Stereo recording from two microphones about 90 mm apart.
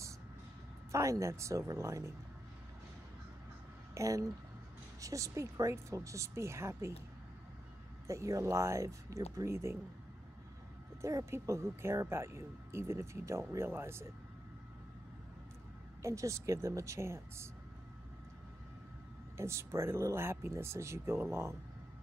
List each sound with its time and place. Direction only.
0.9 s speech: 35° right (ahead or behind)
3.9 s speech: 35° right (ahead or behind)
8.1 s speech: 35° right (ahead or behind)
11.0 s speech: 35° right (ahead or behind)
16.0 s speech: 35° right (ahead or behind)
19.3 s speech: 30° right (ahead or behind)